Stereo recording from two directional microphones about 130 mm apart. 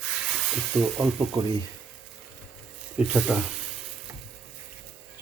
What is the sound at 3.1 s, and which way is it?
Speech, 5° right (ahead or behind).